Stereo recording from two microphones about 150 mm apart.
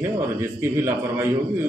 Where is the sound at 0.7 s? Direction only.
15° right (ahead or behind).